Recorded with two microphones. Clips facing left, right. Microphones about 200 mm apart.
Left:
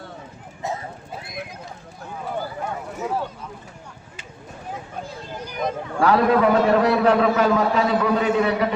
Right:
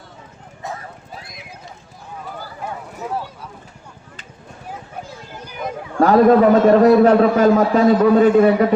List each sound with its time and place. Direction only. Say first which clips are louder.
0.6 s clip-clop: left 2 dB; 20° left (ahead or behind)
1.2 s horse: left 6 dB; 55° left (ahead or behind)
6.0 s a man's voice: right 6 dB; 45° right (ahead or behind)